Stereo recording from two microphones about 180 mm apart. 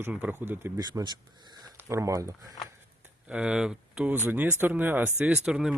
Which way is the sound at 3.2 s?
5° right (ahead or behind).